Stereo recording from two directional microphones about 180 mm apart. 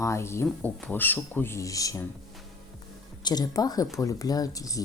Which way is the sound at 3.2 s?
20° left (ahead or behind).